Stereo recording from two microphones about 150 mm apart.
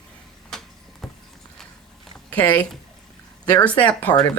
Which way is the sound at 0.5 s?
Centre (ahead or behind).